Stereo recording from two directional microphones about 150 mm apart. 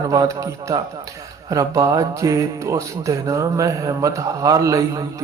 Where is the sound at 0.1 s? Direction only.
20° right (ahead or behind).